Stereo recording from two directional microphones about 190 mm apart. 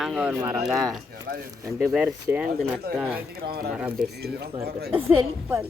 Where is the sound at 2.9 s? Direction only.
55° right (ahead or behind).